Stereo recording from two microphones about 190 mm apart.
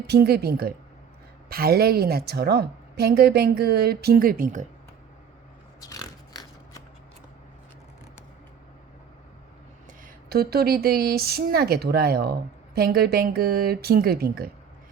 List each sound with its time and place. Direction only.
0.1 s a woman's voice: 55° right (ahead or behind)
5.8 s a sound: 20° left (ahead or behind)
10.2 s speech: 55° right (ahead or behind)